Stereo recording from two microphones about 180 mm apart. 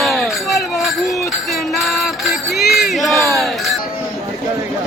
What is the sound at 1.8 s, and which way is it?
Music, centre (ahead or behind).